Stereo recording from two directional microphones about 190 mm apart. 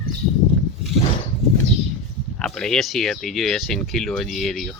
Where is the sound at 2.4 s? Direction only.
5° left (ahead or behind).